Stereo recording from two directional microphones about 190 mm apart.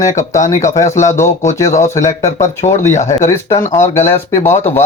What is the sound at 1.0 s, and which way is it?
Speech, 15° left (ahead or behind).